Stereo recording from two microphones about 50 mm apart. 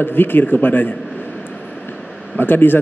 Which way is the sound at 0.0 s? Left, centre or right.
Left.